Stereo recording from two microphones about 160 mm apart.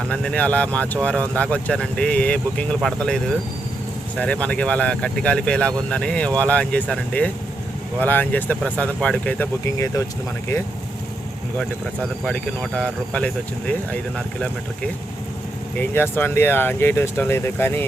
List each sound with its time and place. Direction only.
0.1 s speech: 5° left (ahead or behind)
9.6 s speech: 20° left (ahead or behind)
12.2 s speech: 5° left (ahead or behind)
15.8 s speech: 10° left (ahead or behind)